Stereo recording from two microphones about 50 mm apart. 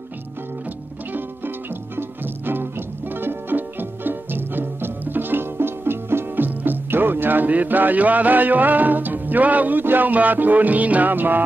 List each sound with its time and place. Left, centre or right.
1.1 s music: right